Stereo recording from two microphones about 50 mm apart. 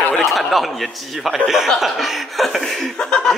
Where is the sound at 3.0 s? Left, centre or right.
Centre.